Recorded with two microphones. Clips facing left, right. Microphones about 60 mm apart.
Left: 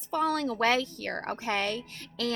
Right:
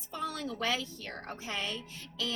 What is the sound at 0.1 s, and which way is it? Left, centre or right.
A woman's voice, left.